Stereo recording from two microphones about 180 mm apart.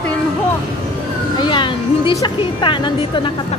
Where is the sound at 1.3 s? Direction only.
25° left (ahead or behind).